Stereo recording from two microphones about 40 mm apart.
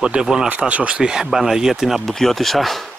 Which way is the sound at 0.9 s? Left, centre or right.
Right.